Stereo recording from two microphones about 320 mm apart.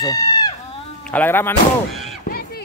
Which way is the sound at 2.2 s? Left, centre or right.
Left.